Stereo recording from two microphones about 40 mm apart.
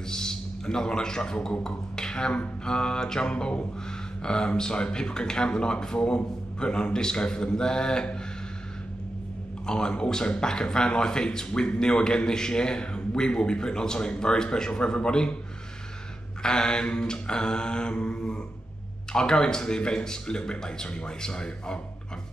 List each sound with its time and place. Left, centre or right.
0.1 s a man's voice: centre
9.7 s a man's voice: centre
16.4 s a man's voice: centre